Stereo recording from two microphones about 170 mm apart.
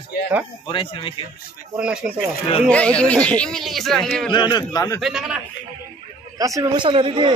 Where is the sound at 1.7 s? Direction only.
5° right (ahead or behind).